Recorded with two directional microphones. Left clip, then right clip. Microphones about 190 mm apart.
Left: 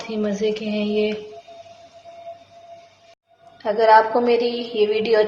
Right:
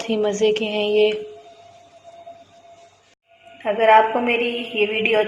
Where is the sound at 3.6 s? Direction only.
5° left (ahead or behind).